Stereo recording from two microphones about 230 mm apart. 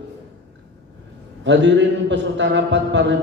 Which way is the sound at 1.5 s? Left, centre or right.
Right.